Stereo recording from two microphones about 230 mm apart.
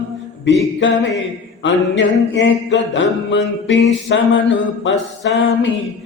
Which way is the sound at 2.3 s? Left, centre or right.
Left.